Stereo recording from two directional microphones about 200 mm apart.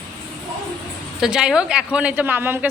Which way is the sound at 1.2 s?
5° right (ahead or behind).